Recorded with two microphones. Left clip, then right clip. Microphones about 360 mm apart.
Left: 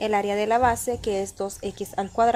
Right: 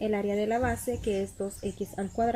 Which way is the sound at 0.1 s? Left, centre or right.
Left.